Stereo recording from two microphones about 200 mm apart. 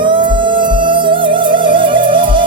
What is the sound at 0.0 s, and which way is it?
Music, 25° right (ahead or behind).